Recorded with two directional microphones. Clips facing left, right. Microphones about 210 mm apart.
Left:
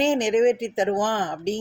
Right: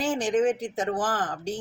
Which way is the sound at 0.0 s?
20° left (ahead or behind).